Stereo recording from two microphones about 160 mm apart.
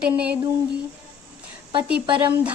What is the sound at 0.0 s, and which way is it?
Speech, 10° right (ahead or behind).